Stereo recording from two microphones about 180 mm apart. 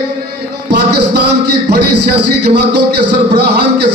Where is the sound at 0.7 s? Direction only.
70° right (ahead or behind).